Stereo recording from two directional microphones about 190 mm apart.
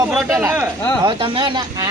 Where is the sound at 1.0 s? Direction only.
25° right (ahead or behind).